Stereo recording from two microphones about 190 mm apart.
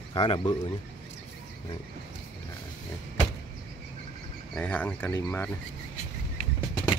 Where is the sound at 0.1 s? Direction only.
25° left (ahead or behind).